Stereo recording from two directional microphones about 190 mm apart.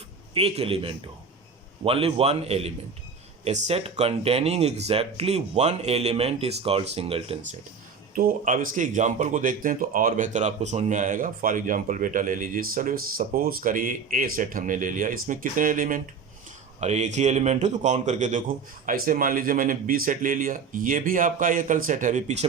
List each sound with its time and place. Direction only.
0.3 s speech: 30° right (ahead or behind)
8.1 s speech: 45° right (ahead or behind)